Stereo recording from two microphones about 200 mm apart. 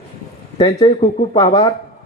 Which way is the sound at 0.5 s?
20° left (ahead or behind).